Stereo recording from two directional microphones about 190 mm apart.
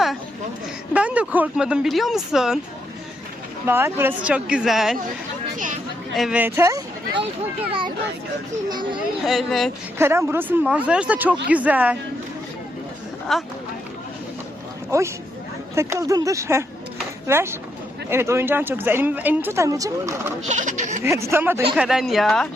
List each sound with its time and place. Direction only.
0.9 s speech: 5° right (ahead or behind)
3.7 s a woman's voice: 10° right (ahead or behind)
5.5 s a sound: 45° right (ahead or behind)
6.1 s speech: 5° right (ahead or behind); by 7.3 s 20° right (ahead or behind)
8.7 s speech: 25° right (ahead or behind)
9.2 s speech: centre (ahead or behind)
10.0 s a woman's voice: 10° right (ahead or behind)
13.3 s speech: centre (ahead or behind)
14.8 s a woman's voice: 15° right (ahead or behind)
20.5 s speech: 40° right (ahead or behind)
21.0 s a woman's voice: 15° right (ahead or behind)
21.8 s speech: centre (ahead or behind)